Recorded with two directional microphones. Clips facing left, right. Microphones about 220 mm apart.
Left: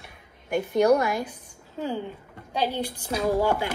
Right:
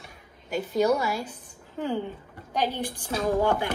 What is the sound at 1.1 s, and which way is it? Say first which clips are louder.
A woman's voice: left 2 dB; 15° left (ahead or behind).